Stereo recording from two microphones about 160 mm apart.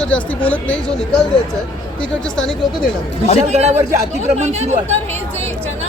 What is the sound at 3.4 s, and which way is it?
Speech, 45° right (ahead or behind).